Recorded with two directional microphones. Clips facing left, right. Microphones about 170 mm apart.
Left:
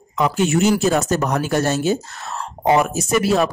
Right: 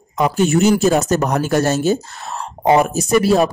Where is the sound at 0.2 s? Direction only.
40° right (ahead or behind).